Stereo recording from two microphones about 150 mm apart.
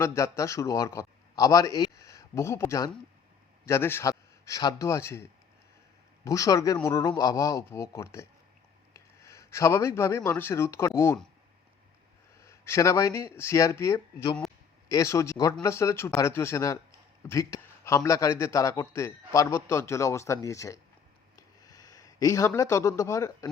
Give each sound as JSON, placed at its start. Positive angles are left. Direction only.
{"t": 0.0, "sound": "a man's voice", "side_deg": 20}
{"t": 6.2, "sound": "a man's voice", "side_deg": 20}
{"t": 12.4, "sound": "a man's voice", "side_deg": 20}
{"t": 21.3, "sound": "a sound", "side_deg": 25}